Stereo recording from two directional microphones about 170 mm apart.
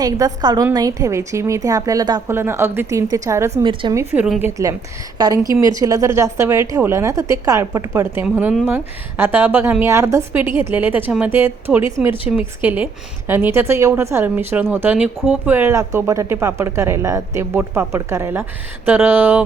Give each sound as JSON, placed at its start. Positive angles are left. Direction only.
{"t": 0.0, "sound": "a woman's voice", "side_deg": -20}
{"t": 3.6, "sound": "a woman's voice", "side_deg": -30}
{"t": 3.9, "sound": "a woman's voice", "side_deg": -10}